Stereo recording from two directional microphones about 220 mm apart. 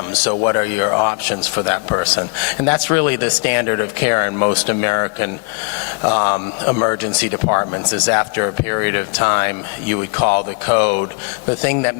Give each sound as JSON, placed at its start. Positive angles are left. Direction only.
{"t": 0.1, "sound": "speech", "side_deg": 20}